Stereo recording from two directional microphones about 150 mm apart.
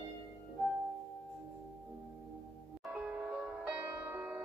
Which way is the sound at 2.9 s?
5° right (ahead or behind).